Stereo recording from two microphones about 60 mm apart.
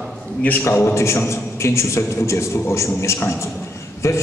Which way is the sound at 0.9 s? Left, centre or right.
Left.